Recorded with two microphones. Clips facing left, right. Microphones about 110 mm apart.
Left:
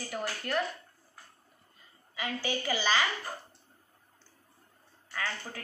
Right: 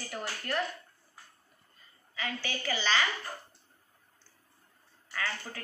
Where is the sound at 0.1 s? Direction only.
5° left (ahead or behind).